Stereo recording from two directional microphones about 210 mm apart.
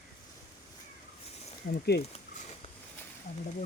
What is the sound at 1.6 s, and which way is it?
Speech, 50° left (ahead or behind).